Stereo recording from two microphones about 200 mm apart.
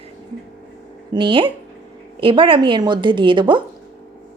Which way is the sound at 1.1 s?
25° right (ahead or behind).